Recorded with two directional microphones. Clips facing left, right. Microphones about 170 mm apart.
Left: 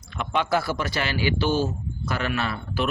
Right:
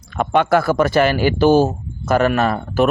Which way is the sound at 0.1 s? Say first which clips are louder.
Right 9 dB; 50° right (ahead or behind).